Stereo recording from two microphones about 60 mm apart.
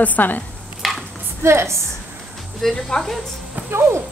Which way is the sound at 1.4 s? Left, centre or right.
Right.